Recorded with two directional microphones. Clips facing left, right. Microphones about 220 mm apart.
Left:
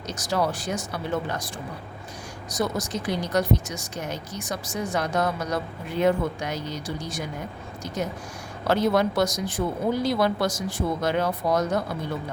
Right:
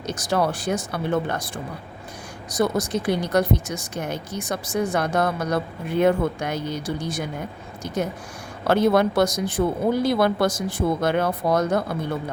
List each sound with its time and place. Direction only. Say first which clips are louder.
0.1 s speech: right 3 dB; 55° right (ahead or behind)
2.5 s speech: right 5 dB; 55° right (ahead or behind)
8.6 s speech: right 3 dB; 55° right (ahead or behind)